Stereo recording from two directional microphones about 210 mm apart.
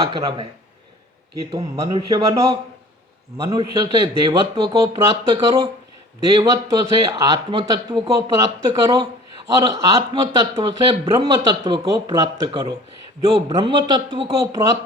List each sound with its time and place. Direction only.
0.0 s speech: 15° right (ahead or behind)
1.5 s speech: 15° right (ahead or behind)